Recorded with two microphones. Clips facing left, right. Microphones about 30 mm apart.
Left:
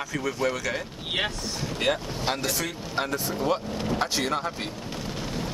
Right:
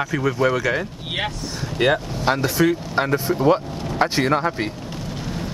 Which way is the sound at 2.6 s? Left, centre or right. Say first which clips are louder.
Right 10 dB; right.